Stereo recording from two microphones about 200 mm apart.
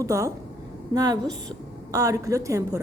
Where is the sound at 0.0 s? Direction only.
15° right (ahead or behind).